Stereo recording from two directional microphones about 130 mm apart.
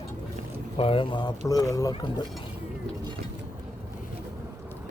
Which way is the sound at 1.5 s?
25° left (ahead or behind).